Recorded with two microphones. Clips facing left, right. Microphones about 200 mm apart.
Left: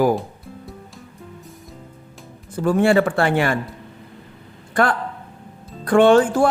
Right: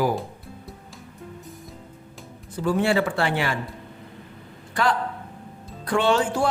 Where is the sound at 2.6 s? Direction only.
50° left (ahead or behind).